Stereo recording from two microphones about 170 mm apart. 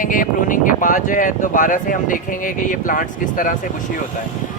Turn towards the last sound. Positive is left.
turn(degrees=55)  # may be behind; listen again after turning